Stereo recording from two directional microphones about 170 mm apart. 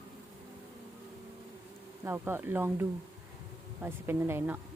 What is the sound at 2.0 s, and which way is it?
Speech, 15° right (ahead or behind).